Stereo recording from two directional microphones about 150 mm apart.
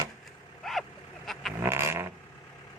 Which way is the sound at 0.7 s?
Centre (ahead or behind).